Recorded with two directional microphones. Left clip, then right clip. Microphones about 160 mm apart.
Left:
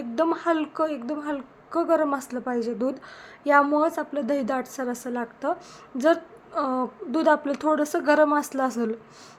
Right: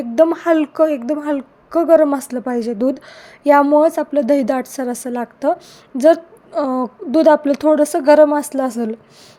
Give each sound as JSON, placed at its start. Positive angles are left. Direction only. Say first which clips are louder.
{"t": 0.0, "sound": "a woman's voice", "louder": "right 10 dB", "side_deg": -40}